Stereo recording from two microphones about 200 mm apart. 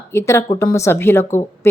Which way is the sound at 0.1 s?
10° left (ahead or behind).